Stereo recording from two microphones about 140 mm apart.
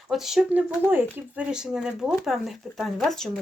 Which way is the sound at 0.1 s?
Centre (ahead or behind).